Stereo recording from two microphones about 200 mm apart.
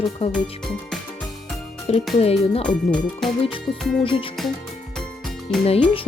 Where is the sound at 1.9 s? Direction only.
30° left (ahead or behind).